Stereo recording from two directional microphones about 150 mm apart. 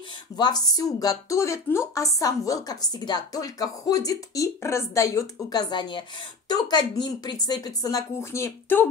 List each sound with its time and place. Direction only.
0.4 s a woman's voice: 25° left (ahead or behind)